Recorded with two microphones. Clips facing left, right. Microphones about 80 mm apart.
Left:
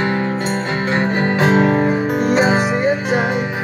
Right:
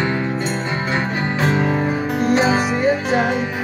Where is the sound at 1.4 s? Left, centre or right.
Left.